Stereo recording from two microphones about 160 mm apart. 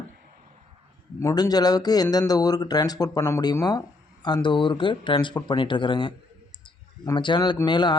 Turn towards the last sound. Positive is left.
turn(degrees=30)  # may be behind; listen again after turning